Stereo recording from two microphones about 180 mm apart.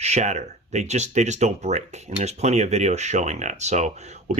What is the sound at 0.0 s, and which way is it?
Speech, 40° right (ahead or behind).